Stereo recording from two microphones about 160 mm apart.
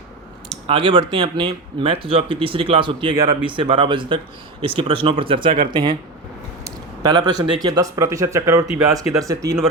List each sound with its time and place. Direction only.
0.7 s speech: 35° right (ahead or behind)
7.0 s speech: 25° right (ahead or behind)